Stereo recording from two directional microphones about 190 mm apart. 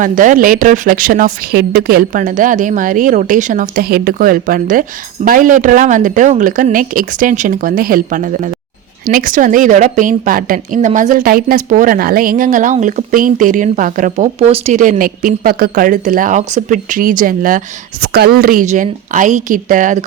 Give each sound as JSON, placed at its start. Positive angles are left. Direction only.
{"t": 0.0, "sound": "a woman's voice", "side_deg": -45}
{"t": 18.0, "sound": "a woman's voice", "side_deg": -55}